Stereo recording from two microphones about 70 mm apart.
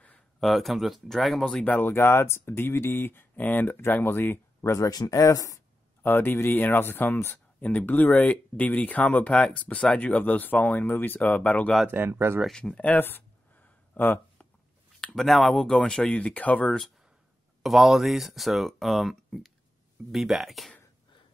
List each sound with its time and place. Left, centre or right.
0.4 s speech: centre
1.4 s speech: centre
1.8 s speech: left
4.9 s speech: left
6.0 s speech: left
12.1 s speech: right
12.4 s speech: centre
13.0 s a sound: left
15.0 s speech: centre; by 16.7 s left
17.6 s speech: centre